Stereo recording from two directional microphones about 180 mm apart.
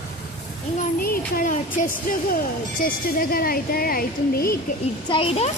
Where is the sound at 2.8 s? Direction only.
55° left (ahead or behind).